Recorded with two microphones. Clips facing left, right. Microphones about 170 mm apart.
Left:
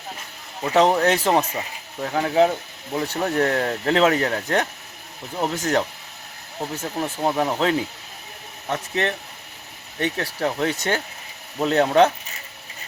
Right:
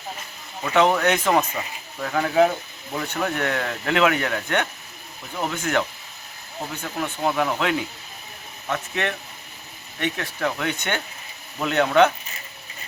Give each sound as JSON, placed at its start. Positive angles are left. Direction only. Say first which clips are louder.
{"t": 0.6, "sound": "speech", "louder": "left 2 dB", "side_deg": 35}
{"t": 2.0, "sound": "speech", "louder": "even", "side_deg": 20}
{"t": 3.1, "sound": "speech", "louder": "left 3 dB", "side_deg": 35}